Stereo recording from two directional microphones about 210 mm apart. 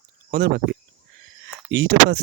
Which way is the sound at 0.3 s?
50° right (ahead or behind).